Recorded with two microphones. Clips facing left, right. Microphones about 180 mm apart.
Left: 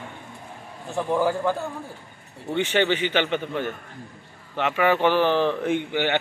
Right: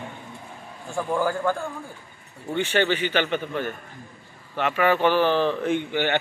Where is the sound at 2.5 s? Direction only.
15° left (ahead or behind).